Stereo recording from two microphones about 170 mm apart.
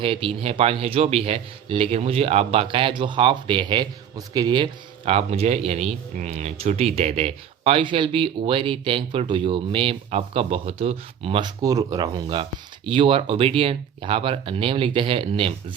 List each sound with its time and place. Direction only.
0.0 s speech: 30° right (ahead or behind)